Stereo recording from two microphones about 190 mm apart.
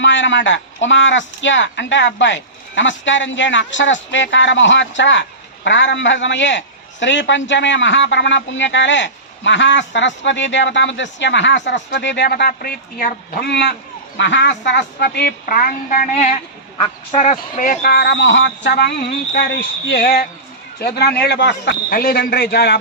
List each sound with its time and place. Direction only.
0.0 s a man's voice: 75° left (ahead or behind); by 16.0 s 45° left (ahead or behind)
16.1 s a man's voice: 35° left (ahead or behind); by 22.8 s 60° left (ahead or behind)